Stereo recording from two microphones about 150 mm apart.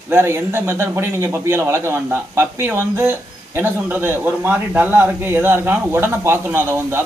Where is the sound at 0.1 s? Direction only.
15° right (ahead or behind).